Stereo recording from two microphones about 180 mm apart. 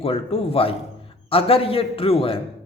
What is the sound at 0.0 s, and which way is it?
A man's voice, 35° left (ahead or behind).